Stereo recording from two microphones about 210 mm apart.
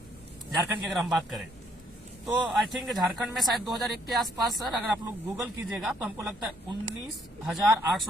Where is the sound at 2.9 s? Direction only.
Centre (ahead or behind).